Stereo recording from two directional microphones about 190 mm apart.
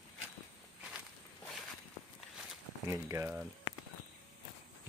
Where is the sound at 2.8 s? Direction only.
15° right (ahead or behind).